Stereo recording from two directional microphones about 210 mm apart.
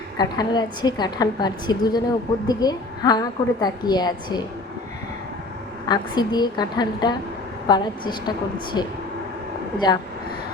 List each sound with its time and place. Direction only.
0.2 s a woman's voice: 20° left (ahead or behind)
5.9 s a woman's voice: 20° left (ahead or behind)